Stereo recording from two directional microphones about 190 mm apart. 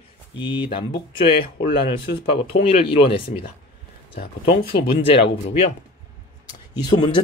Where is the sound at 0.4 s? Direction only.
25° left (ahead or behind).